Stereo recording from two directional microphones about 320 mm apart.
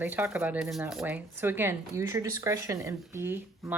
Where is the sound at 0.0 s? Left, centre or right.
Centre.